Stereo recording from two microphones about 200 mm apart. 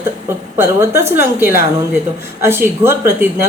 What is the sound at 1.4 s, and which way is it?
Speech, 50° left (ahead or behind).